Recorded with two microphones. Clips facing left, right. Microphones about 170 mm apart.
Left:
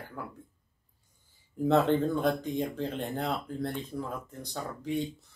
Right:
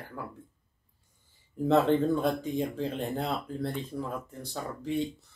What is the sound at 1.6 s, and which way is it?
Speech, centre (ahead or behind).